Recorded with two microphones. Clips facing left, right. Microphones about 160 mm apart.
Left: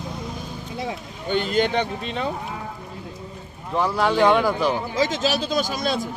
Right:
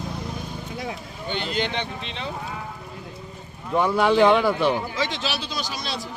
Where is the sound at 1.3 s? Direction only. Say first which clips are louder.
Left 6 dB; 45° left (ahead or behind).